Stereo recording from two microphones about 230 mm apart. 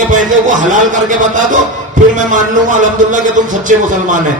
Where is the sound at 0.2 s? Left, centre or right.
Right.